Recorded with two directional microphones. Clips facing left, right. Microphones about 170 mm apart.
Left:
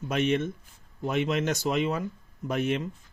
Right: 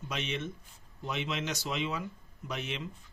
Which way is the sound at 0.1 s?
50° left (ahead or behind).